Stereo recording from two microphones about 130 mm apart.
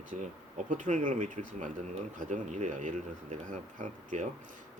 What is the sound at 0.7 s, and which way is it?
Speech, 70° right (ahead or behind).